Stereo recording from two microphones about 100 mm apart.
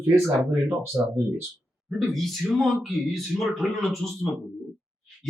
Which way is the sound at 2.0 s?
Centre (ahead or behind).